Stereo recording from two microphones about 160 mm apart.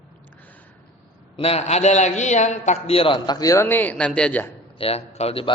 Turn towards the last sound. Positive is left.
turn(degrees=40)  # may be behind; listen again after turning